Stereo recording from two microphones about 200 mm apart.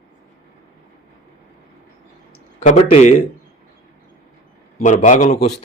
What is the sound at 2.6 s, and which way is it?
Speech, 35° left (ahead or behind).